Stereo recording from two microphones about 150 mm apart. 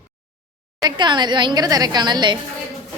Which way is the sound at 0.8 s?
30° right (ahead or behind).